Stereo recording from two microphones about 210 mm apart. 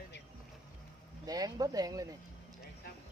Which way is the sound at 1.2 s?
20° right (ahead or behind).